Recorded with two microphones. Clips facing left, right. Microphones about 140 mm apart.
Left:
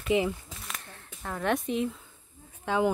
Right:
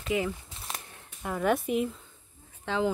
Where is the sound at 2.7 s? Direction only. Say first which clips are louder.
Left 3 dB; 15° left (ahead or behind).